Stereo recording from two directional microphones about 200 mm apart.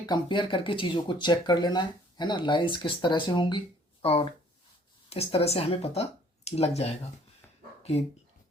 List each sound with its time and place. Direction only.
0.0 s speech: 20° left (ahead or behind)